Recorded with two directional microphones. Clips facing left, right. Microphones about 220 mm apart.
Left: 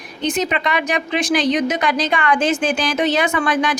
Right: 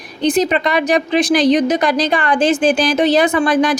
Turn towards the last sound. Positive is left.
turn(degrees=-35)  # may be behind; listen again after turning